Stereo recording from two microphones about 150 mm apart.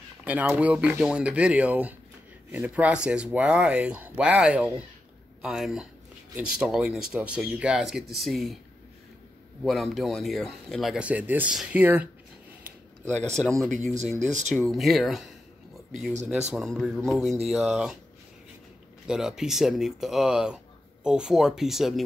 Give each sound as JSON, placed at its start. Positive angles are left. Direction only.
{"t": 0.2, "sound": "speech", "side_deg": -10}
{"t": 9.6, "sound": "speech", "side_deg": 0}
{"t": 13.0, "sound": "speech", "side_deg": 5}
{"t": 14.2, "sound": "speech", "side_deg": -55}
{"t": 14.5, "sound": "speech", "side_deg": 0}
{"t": 19.0, "sound": "speech", "side_deg": -5}